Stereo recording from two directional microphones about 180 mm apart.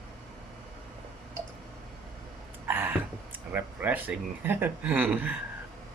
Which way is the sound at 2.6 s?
10° right (ahead or behind).